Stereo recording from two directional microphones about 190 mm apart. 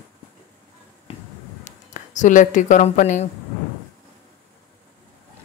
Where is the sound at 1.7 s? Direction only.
40° left (ahead or behind).